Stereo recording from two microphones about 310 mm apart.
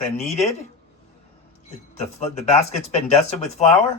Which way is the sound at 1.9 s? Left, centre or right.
Left.